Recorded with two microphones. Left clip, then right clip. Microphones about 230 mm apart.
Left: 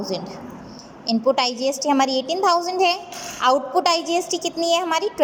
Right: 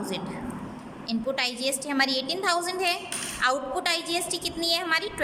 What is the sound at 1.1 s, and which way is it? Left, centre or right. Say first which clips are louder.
A woman's voice: left 9 dB; centre.